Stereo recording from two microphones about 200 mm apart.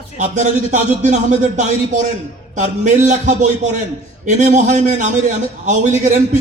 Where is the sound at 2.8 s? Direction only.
40° right (ahead or behind).